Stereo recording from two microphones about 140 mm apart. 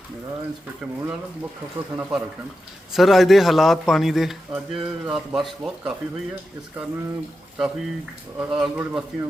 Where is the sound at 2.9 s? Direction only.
Centre (ahead or behind).